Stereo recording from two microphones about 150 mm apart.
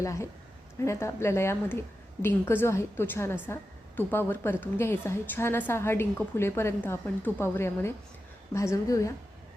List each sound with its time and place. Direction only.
0.0 s a woman's voice: 20° left (ahead or behind)